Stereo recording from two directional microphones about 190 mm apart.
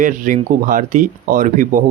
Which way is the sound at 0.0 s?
45° right (ahead or behind).